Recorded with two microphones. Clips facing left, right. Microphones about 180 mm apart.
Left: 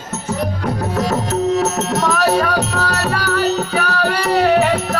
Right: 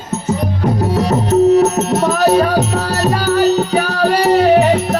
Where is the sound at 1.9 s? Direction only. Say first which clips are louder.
Right 4 dB; 25° right (ahead or behind).